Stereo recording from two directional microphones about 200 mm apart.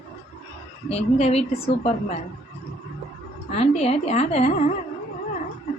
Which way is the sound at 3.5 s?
35° left (ahead or behind).